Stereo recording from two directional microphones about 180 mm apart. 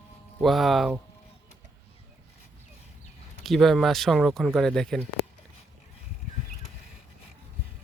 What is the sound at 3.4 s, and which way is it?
Speech, centre (ahead or behind).